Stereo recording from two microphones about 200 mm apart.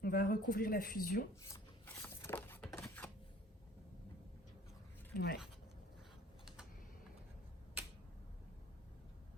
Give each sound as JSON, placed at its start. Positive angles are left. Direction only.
{"t": 0.0, "sound": "speech", "side_deg": 45}
{"t": 1.4, "sound": "a sound", "side_deg": 15}
{"t": 5.1, "sound": "speech", "side_deg": 55}